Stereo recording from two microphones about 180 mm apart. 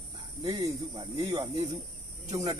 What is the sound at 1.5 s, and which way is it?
Speech, 40° right (ahead or behind).